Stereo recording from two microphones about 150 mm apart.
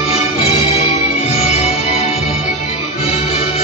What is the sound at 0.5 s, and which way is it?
Music, 40° left (ahead or behind).